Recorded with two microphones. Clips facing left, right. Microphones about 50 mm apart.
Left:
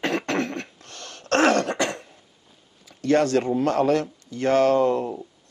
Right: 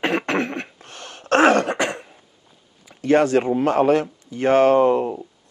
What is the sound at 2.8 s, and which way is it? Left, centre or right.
Speech, centre.